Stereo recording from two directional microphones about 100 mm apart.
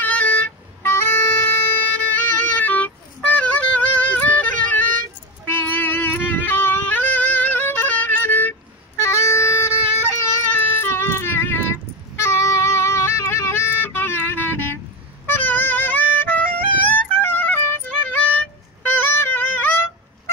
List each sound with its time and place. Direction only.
0.0 s vehicle: 15° left (ahead or behind)
0.8 s music: 25° left (ahead or behind)
10.5 s child singing: 25° left (ahead or behind)
12.2 s music: 25° left (ahead or behind)